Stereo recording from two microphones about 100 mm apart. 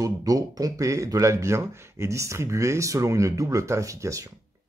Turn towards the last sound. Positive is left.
turn(degrees=-30)  # may be behind; listen again after turning